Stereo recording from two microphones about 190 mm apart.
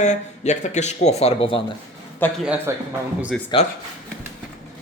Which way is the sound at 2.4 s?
5° right (ahead or behind).